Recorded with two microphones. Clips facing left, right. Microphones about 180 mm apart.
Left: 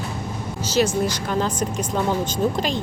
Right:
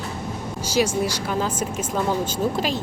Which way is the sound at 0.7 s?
10° right (ahead or behind).